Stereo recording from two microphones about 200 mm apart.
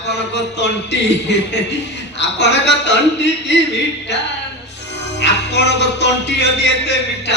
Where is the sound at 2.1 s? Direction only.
60° left (ahead or behind).